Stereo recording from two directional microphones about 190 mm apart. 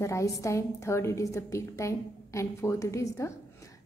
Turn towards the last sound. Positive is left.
turn(degrees=15)  # may be behind; listen again after turning